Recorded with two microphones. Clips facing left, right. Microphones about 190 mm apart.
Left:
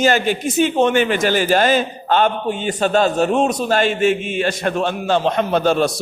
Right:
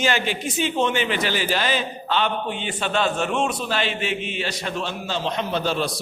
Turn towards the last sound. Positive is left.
turn(degrees=50)  # may be behind; listen again after turning